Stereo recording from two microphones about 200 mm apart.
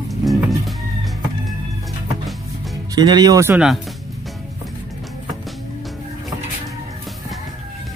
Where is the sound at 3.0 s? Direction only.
20° right (ahead or behind); by 3.8 s 5° right (ahead or behind).